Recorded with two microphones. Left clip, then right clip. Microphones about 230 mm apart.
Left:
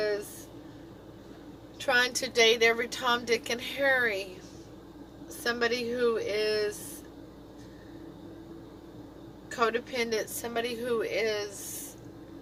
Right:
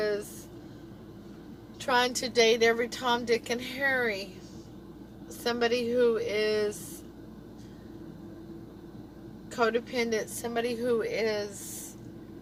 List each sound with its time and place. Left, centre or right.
1.8 s a woman's voice: left
5.4 s a woman's voice: left
9.5 s a woman's voice: left